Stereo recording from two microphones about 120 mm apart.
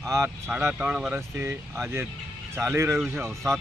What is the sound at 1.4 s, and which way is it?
Speech, 20° right (ahead or behind).